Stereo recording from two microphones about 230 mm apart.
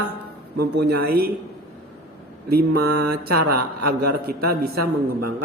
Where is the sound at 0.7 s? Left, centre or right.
Right.